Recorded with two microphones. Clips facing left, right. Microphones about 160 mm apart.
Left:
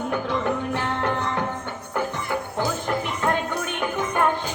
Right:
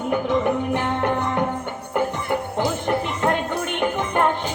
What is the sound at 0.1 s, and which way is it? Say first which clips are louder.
Music: right 6 dB; 20° right (ahead or behind).